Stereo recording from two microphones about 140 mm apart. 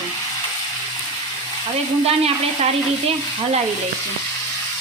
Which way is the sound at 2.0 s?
45° right (ahead or behind).